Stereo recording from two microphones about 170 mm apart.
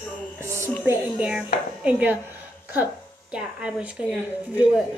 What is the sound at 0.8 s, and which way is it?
A woman's voice, 5° right (ahead or behind).